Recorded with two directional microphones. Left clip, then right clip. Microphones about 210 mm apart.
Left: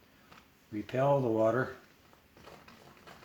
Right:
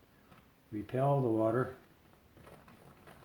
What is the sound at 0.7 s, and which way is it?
Speech, 15° left (ahead or behind).